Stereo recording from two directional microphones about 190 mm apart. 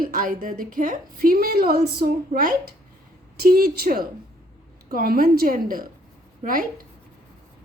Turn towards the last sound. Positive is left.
turn(degrees=-45)  # may be behind; listen again after turning